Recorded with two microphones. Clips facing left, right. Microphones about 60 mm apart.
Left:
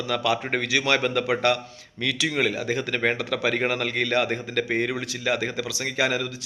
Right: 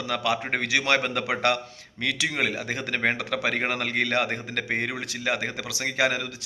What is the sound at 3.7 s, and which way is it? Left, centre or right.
Speech, right.